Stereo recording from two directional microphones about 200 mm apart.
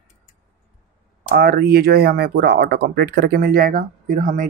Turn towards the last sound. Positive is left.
turn(degrees=-40)  # may be behind; listen again after turning